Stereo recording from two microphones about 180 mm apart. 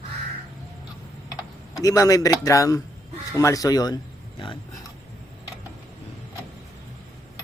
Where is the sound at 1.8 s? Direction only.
20° left (ahead or behind).